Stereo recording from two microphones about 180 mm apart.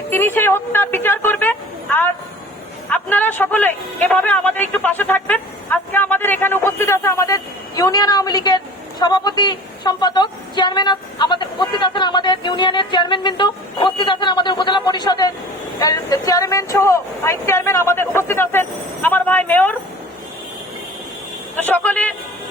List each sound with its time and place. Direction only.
0.1 s a man's voice: 10° left (ahead or behind)
21.5 s speech: 10° left (ahead or behind)